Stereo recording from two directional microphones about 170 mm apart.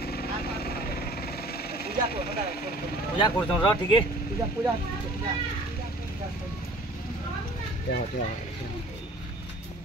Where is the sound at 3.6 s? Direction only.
25° left (ahead or behind).